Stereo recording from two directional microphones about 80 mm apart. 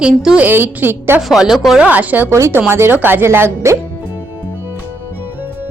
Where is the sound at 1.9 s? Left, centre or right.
Centre.